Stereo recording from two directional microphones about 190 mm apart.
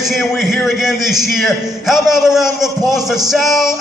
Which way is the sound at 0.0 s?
Centre (ahead or behind).